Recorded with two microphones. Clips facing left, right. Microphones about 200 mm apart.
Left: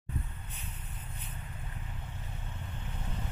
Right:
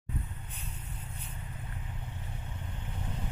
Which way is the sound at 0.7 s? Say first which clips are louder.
Right 2 dB; 10° right (ahead or behind).